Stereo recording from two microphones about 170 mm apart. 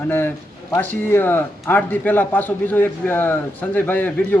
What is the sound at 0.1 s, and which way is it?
Speech, 15° left (ahead or behind).